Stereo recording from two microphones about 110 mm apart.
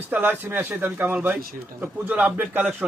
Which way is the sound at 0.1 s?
15° right (ahead or behind).